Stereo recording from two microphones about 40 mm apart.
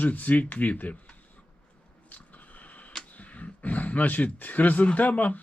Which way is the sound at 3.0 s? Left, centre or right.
Left.